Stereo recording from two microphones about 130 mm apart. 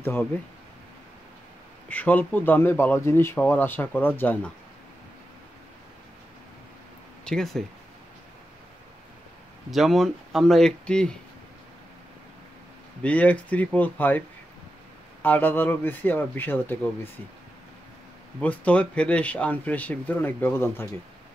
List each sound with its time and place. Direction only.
0.0 s speech: 15° left (ahead or behind)
1.9 s speech: 10° left (ahead or behind)
7.2 s speech: 5° left (ahead or behind)
9.7 s speech: centre (ahead or behind)
13.0 s speech: 10° left (ahead or behind)
15.2 s speech: 15° left (ahead or behind)
18.4 s speech: 10° left (ahead or behind)